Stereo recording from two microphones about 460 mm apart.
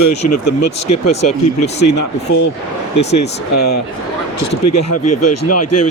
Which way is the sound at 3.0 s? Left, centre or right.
Left.